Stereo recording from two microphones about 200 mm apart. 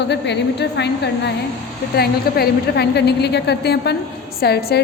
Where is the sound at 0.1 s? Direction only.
60° left (ahead or behind).